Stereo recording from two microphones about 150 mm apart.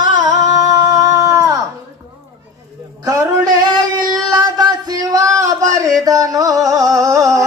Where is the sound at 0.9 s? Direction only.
25° right (ahead or behind).